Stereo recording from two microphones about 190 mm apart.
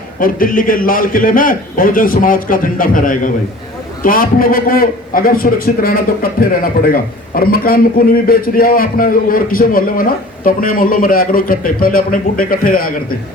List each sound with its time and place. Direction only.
0.2 s a man's voice: 45° left (ahead or behind)